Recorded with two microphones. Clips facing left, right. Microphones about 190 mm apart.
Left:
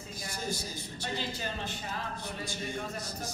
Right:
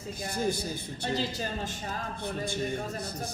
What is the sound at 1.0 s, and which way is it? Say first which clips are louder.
A man's voice: right 5 dB; 40° right (ahead or behind).